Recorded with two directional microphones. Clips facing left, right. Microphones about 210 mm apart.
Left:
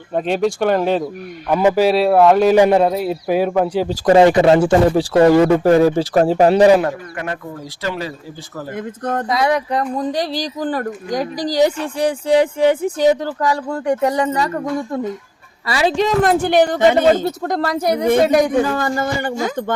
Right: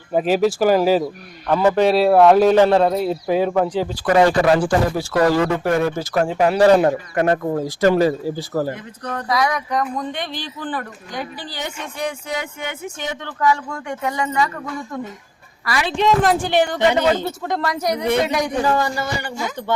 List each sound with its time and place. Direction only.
0.1 s a man's voice: 5° right (ahead or behind)
1.5 s a man's voice: 10° left (ahead or behind)
2.6 s speech: 15° left (ahead or behind)
3.8 s speech: 30° left (ahead or behind)
7.2 s speech: 45° right (ahead or behind)
8.7 s a man's voice: 50° left (ahead or behind)
9.3 s speech: 30° left (ahead or behind)
16.2 s speech: 55° left (ahead or behind)
16.6 s speech: 40° left (ahead or behind)
18.0 s a man's voice: 45° left (ahead or behind)